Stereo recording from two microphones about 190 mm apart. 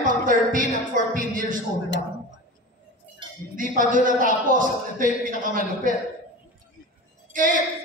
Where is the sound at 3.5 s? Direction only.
45° right (ahead or behind).